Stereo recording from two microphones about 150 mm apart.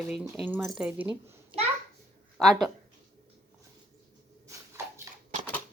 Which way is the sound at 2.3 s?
Centre (ahead or behind).